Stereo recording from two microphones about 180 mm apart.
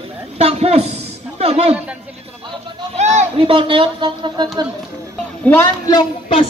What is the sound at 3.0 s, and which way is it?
Speech, 40° right (ahead or behind).